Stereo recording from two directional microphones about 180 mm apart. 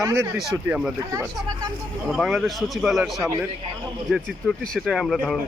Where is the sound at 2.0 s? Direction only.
Centre (ahead or behind).